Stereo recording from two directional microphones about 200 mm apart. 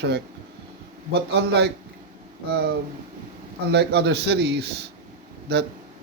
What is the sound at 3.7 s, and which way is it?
Speech, 55° right (ahead or behind).